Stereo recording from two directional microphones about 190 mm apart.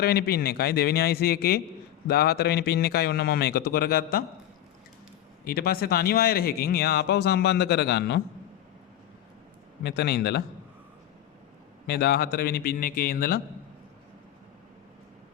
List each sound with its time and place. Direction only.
0.0 s speech: 55° left (ahead or behind)
5.5 s speech: 55° left (ahead or behind)
9.8 s speech: 60° left (ahead or behind)
11.9 s a man's voice: 55° left (ahead or behind)